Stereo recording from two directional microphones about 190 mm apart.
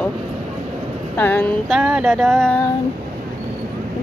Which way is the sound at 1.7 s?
5° right (ahead or behind).